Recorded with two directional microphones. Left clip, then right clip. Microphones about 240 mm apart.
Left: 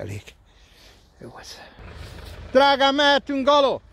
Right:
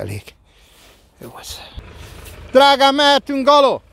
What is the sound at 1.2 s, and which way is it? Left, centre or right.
Speech, centre.